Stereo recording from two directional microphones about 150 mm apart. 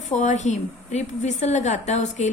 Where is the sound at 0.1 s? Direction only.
50° left (ahead or behind).